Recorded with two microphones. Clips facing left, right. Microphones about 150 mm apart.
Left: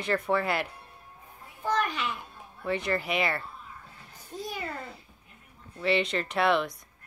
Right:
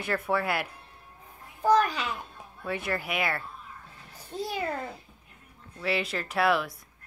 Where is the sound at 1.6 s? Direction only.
35° right (ahead or behind).